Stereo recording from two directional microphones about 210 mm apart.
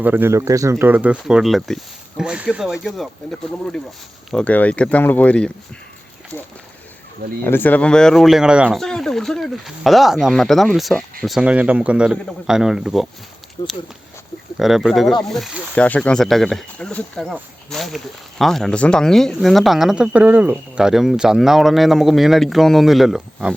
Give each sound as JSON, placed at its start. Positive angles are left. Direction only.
{"t": 0.0, "sound": "speech", "side_deg": -10}
{"t": 7.4, "sound": "speech", "side_deg": 10}
{"t": 13.6, "sound": "speech", "side_deg": 20}
{"t": 14.6, "sound": "speech", "side_deg": 0}